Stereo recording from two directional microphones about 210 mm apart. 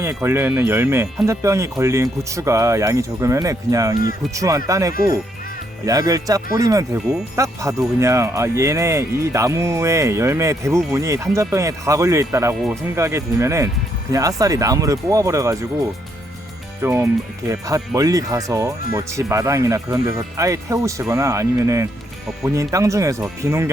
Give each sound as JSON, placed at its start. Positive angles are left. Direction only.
{"t": 0.0, "sound": "speech", "side_deg": -15}
{"t": 16.8, "sound": "speech", "side_deg": -15}